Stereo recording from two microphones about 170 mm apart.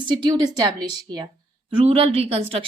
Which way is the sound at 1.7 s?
35° right (ahead or behind).